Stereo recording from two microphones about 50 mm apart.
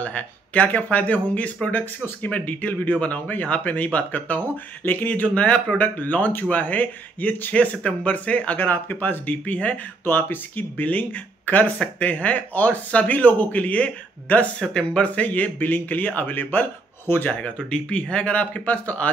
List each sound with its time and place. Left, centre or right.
0.0 s speech: left
5.8 s speech: left
10.0 s speech: left
17.3 s speech: left